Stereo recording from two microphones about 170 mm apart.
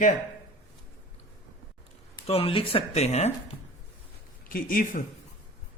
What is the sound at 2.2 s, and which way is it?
Speech, 35° left (ahead or behind).